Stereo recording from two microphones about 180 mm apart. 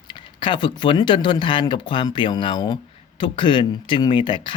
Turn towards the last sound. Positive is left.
turn(degrees=25)  # may be behind; listen again after turning